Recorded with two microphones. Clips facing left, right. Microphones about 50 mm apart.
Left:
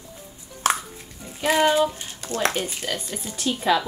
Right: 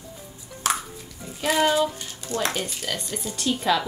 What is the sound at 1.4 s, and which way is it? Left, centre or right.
A child's voice, left.